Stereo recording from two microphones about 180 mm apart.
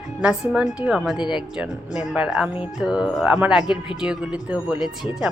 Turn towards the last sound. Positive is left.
turn(degrees=-5)  # may be behind; listen again after turning